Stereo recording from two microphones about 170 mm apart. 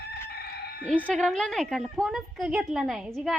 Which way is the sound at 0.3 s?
70° left (ahead or behind).